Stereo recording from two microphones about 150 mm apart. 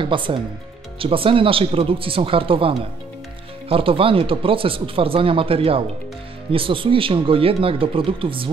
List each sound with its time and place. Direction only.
0.0 s speech: 35° right (ahead or behind)